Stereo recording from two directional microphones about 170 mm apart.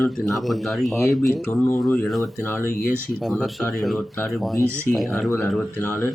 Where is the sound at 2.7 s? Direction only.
Centre (ahead or behind).